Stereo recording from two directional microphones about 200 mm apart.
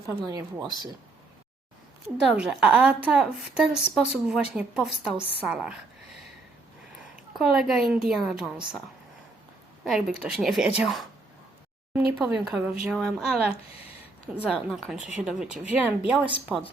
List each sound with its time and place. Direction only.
0.3 s speech: 15° right (ahead or behind)
2.0 s a woman's voice: 5° right (ahead or behind)
7.3 s a woman's voice: centre (ahead or behind)
9.8 s a woman's voice: 5° right (ahead or behind)